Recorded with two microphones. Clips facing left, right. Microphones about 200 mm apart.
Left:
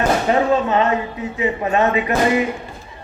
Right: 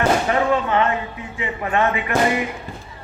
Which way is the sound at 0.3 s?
25° left (ahead or behind).